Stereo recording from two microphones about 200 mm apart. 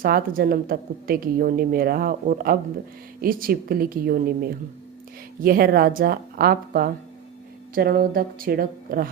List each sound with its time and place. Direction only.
0.0 s a woman's voice: 45° right (ahead or behind)